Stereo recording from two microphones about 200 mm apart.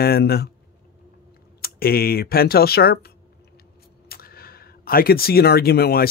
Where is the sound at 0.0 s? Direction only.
50° left (ahead or behind).